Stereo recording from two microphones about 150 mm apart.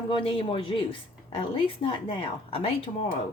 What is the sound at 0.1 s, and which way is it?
Speech, 35° left (ahead or behind).